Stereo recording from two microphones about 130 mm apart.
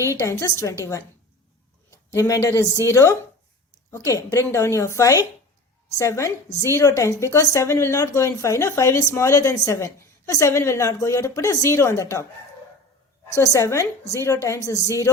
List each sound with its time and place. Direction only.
0.0 s a woman's voice: 20° left (ahead or behind)
2.1 s a woman's voice: 25° left (ahead or behind)
13.3 s a woman's voice: 25° left (ahead or behind)